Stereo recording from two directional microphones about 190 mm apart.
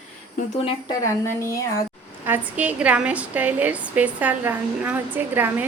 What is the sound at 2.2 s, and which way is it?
A woman's voice, 10° right (ahead or behind).